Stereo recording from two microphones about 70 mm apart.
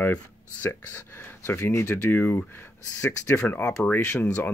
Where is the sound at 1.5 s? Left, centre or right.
Left.